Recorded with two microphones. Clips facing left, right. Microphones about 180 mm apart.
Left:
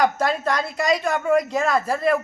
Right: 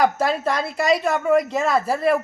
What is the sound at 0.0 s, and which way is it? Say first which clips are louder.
Speech: right 1 dB; 5° right (ahead or behind).